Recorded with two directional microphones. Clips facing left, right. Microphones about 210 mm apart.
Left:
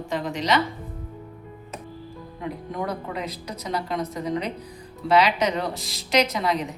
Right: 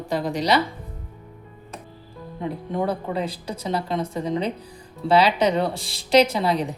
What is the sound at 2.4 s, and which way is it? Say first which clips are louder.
A woman's voice: right 4 dB; 25° right (ahead or behind).